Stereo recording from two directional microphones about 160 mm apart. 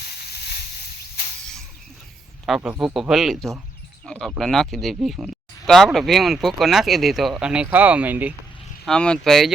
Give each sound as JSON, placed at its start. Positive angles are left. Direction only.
{"t": 0.3, "sound": "boat", "side_deg": 80}
{"t": 2.6, "sound": "speech", "side_deg": -10}
{"t": 8.9, "sound": "speech", "side_deg": 5}